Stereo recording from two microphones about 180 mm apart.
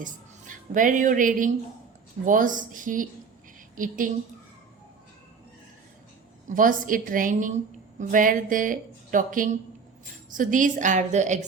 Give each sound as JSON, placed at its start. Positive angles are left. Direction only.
{"t": 0.0, "sound": "a woman's voice", "side_deg": -45}
{"t": 6.5, "sound": "a woman's voice", "side_deg": -50}